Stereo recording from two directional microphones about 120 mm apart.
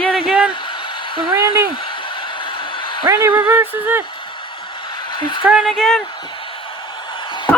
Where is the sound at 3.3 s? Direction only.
20° right (ahead or behind).